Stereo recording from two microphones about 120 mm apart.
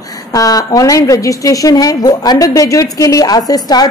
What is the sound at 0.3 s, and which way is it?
A woman's voice, 30° left (ahead or behind).